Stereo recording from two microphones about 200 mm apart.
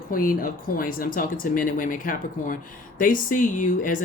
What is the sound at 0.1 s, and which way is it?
Speech, 45° left (ahead or behind).